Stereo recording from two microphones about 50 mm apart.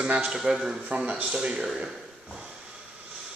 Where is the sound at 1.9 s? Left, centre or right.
Centre.